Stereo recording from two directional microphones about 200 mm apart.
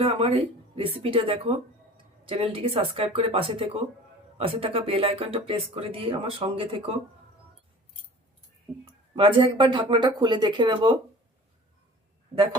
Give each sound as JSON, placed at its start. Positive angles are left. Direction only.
{"t": 0.0, "sound": "speech", "side_deg": -30}
{"t": 9.1, "sound": "speech", "side_deg": -25}